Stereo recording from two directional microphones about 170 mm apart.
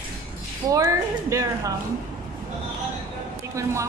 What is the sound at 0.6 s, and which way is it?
A woman's voice, 20° right (ahead or behind).